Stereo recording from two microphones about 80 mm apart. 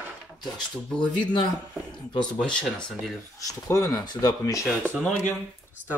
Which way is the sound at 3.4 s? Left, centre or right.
Left.